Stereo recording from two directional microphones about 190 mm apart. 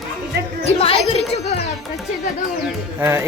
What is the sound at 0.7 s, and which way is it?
Speech, 30° left (ahead or behind).